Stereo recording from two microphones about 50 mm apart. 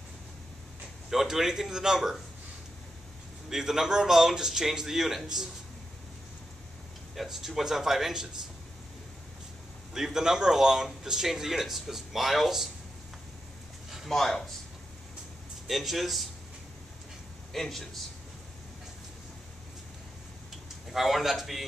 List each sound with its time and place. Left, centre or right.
1.1 s speech: centre
3.4 s speech: centre
7.2 s speech: centre
9.9 s speech: centre
14.0 s a man's voice: centre
15.6 s a man's voice: centre
17.5 s a man's voice: centre
20.9 s a man's voice: centre